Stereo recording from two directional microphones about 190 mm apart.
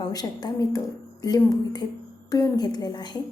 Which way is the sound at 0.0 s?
20° left (ahead or behind).